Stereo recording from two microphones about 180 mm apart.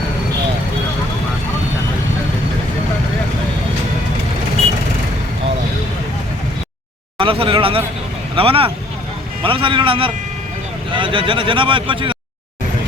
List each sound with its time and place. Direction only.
7.2 s speech: 30° right (ahead or behind)